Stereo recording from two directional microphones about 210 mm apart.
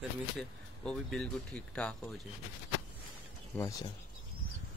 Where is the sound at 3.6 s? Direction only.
15° left (ahead or behind).